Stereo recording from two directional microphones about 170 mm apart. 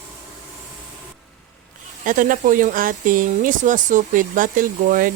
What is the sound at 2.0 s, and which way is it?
Speech, 50° right (ahead or behind).